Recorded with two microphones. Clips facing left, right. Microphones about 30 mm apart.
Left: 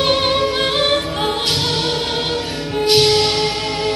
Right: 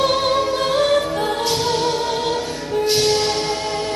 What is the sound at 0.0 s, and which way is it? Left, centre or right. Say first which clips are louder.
Music: left 1 dB; left.